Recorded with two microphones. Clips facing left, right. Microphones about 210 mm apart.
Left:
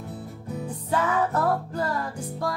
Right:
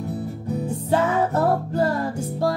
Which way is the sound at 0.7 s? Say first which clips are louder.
Right 4 dB; 25° right (ahead or behind).